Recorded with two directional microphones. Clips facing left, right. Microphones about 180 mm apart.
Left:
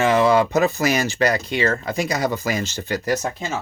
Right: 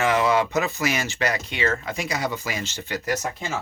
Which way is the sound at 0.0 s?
30° left (ahead or behind).